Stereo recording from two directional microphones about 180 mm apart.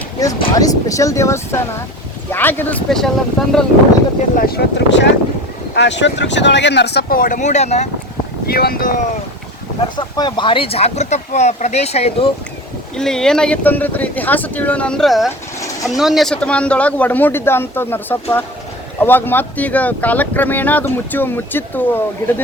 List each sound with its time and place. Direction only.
0.2 s speech: 20° left (ahead or behind); by 3.5 s centre (ahead or behind)
4.4 s speech: 60° left (ahead or behind)
5.7 s speech: 75° left (ahead or behind); by 7.9 s 40° left (ahead or behind)
8.4 s speech: 60° left (ahead or behind)
10.0 s speech: 25° left (ahead or behind)
13.0 s speech: 5° left (ahead or behind)